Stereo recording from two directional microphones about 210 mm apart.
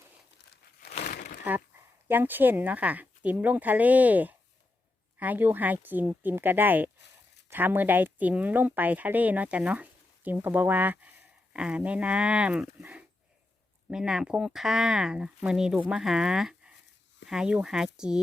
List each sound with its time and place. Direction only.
0.8 s crumpling: 35° left (ahead or behind)
2.0 s speech: 10° right (ahead or behind)